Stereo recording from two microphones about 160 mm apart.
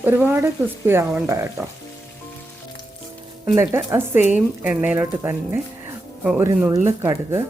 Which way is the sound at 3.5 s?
15° right (ahead or behind).